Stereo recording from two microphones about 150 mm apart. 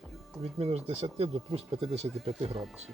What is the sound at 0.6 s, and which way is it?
Speech, 45° right (ahead or behind).